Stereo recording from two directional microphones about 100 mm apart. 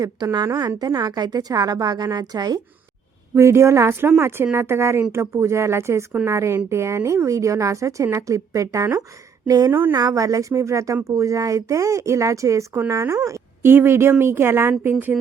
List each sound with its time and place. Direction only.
0.0 s a woman's voice: 40° right (ahead or behind)
3.3 s a woman's voice: 25° right (ahead or behind)